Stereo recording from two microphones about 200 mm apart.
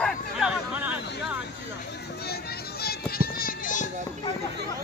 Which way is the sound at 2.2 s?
50° left (ahead or behind).